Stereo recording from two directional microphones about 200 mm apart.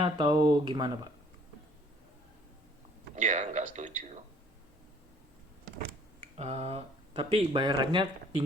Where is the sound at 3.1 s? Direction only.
35° right (ahead or behind).